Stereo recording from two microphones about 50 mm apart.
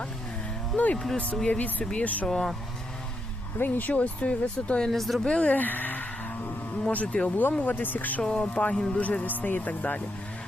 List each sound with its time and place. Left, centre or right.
0.7 s speech: centre
1.5 s speech: left
2.2 s speech: centre
3.6 s speech: left; by 4.9 s centre
4.9 s speech: centre
5.2 s speech: centre
5.5 s a sound: left
6.9 s speech: left
7.6 s speech: left
8.2 s speech: centre
9.0 s speech: left